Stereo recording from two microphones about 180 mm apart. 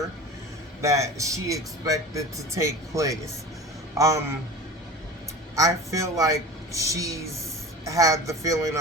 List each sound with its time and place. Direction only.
0.8 s speech: 15° right (ahead or behind)
5.5 s speech: 15° right (ahead or behind)